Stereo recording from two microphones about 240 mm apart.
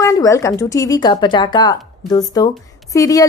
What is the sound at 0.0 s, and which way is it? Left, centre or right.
Speech, centre.